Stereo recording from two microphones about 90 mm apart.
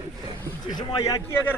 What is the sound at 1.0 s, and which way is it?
Speech, 40° left (ahead or behind).